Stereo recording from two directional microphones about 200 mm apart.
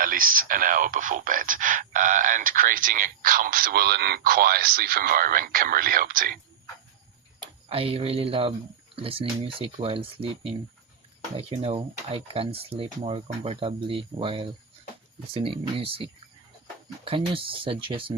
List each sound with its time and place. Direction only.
0.0 s speech: 45° right (ahead or behind)
7.7 s speech: 30° right (ahead or behind)
17.1 s speech: 25° right (ahead or behind)